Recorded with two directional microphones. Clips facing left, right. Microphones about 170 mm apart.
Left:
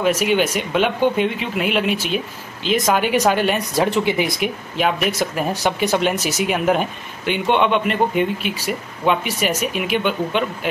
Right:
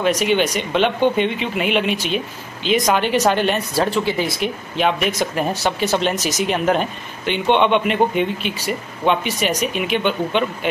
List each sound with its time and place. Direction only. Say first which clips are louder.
0.0 s speech: even; 5° left (ahead or behind)
3.7 s speech: left 1 dB; 20° left (ahead or behind)
4.4 s speech: even; 5° left (ahead or behind)